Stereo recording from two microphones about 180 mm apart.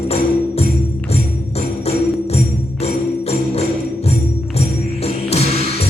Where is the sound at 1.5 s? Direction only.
35° left (ahead or behind).